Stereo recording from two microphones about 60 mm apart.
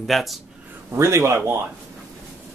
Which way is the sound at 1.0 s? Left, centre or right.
Right.